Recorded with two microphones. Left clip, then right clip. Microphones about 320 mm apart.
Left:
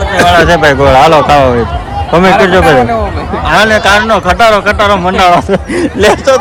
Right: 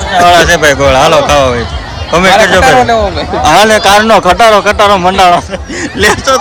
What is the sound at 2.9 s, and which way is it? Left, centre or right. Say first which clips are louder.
Speech: right 4 dB; right.